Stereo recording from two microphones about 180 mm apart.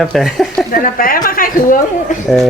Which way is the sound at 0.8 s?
50° left (ahead or behind).